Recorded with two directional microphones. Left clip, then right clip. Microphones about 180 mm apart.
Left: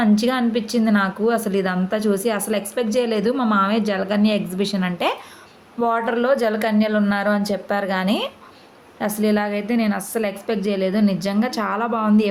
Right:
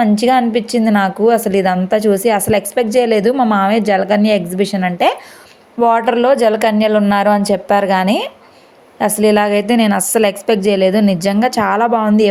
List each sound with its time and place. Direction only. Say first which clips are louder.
0.0 s a woman's voice: right 8 dB; 30° right (ahead or behind)